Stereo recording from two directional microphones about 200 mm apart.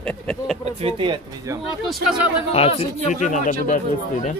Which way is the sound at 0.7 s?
30° right (ahead or behind).